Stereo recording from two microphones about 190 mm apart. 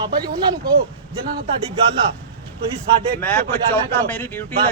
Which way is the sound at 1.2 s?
50° right (ahead or behind).